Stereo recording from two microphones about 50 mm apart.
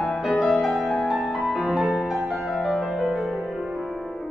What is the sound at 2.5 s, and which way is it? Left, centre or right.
Music, centre.